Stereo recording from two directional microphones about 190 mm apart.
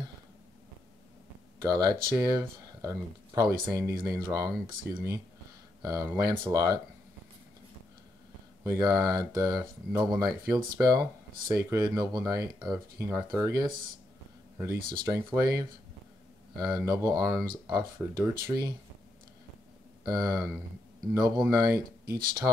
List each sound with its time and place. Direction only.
1.6 s speech: 20° right (ahead or behind)
8.6 s speech: 20° right (ahead or behind)
14.9 s speech: 20° right (ahead or behind)
20.1 s speech: 20° right (ahead or behind)
21.5 s speech: 20° right (ahead or behind)